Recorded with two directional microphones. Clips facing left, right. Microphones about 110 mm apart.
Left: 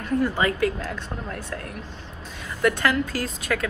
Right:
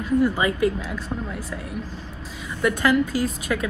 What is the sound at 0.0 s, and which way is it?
Speech, 10° right (ahead or behind).